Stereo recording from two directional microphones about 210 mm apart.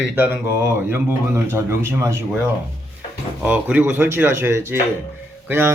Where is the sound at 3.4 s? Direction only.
5° right (ahead or behind).